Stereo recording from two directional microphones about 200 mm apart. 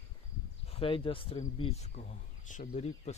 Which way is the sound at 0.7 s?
25° left (ahead or behind).